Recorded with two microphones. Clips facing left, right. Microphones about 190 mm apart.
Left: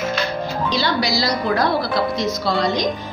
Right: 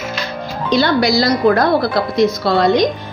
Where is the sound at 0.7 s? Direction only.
55° right (ahead or behind).